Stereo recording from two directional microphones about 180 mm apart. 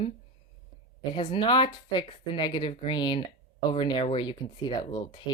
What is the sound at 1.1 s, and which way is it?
Speech, 30° left (ahead or behind).